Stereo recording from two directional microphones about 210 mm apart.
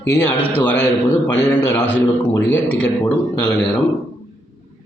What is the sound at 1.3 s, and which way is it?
Speech, 5° left (ahead or behind).